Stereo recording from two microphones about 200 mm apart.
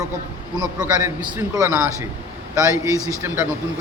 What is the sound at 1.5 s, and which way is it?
A man's voice, 15° right (ahead or behind).